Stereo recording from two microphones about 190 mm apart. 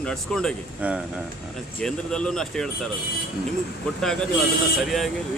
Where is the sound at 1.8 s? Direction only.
5° left (ahead or behind).